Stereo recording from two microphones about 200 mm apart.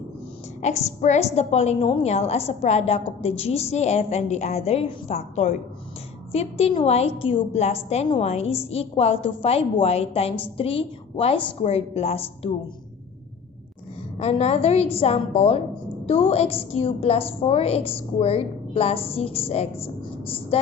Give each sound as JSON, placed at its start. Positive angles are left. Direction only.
{"t": 0.6, "sound": "a woman's voice", "side_deg": 35}
{"t": 14.2, "sound": "a woman's voice", "side_deg": 30}